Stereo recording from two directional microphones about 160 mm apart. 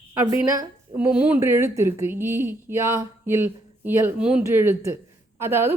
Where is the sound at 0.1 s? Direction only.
20° right (ahead or behind).